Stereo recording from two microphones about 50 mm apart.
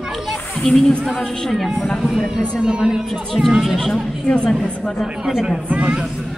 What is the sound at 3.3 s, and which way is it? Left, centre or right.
Speech, centre.